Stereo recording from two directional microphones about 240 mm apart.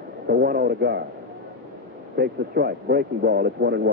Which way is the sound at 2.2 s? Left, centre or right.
Right.